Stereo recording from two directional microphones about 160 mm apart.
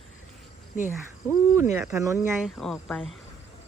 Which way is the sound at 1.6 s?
15° right (ahead or behind).